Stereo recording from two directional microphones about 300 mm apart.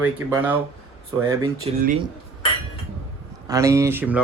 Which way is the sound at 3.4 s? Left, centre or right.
Centre.